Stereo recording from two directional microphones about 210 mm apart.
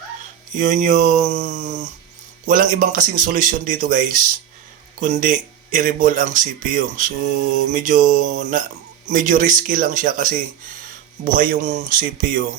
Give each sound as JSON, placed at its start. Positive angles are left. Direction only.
{"t": 0.5, "sound": "speech", "side_deg": -35}